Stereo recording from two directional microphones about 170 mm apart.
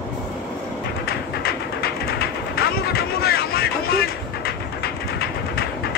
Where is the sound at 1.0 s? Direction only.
65° left (ahead or behind).